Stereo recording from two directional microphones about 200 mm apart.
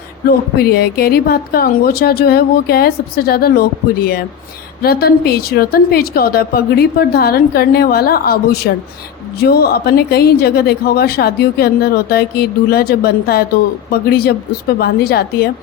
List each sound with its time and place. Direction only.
0.6 s a woman's voice: 50° left (ahead or behind)